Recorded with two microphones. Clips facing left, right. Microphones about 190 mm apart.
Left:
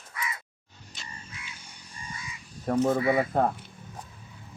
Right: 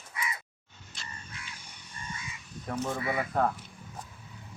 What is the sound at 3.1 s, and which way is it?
Speech, 30° left (ahead or behind).